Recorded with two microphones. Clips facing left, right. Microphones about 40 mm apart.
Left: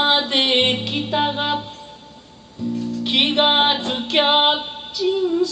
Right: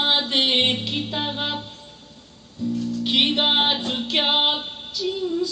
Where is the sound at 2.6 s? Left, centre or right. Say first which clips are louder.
Left 1 dB; centre.